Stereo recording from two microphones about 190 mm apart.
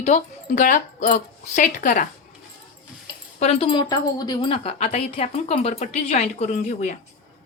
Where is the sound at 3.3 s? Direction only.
30° left (ahead or behind).